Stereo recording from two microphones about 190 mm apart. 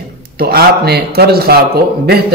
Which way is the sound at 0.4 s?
55° right (ahead or behind).